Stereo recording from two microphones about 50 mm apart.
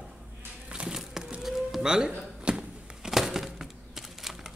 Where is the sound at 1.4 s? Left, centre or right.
Centre.